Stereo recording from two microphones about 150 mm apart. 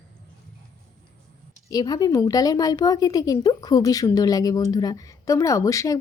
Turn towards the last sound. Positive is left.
turn(degrees=20)  # may be behind; listen again after turning